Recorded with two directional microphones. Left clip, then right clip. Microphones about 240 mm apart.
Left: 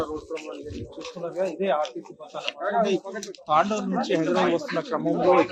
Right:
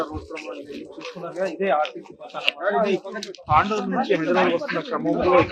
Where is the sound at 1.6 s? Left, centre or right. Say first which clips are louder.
Right 4 dB; left.